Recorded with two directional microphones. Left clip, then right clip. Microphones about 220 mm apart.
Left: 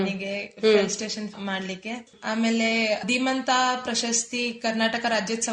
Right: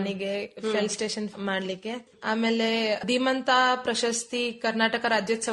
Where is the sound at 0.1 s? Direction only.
50° right (ahead or behind).